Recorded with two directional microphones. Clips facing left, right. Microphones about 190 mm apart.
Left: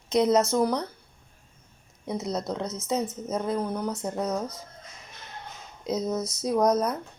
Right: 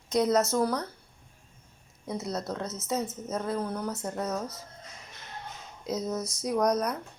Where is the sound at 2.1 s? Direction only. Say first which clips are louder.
Left 3 dB; 20° left (ahead or behind).